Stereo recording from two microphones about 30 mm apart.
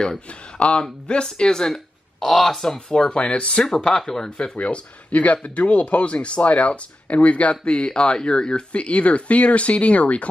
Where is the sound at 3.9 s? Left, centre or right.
Centre.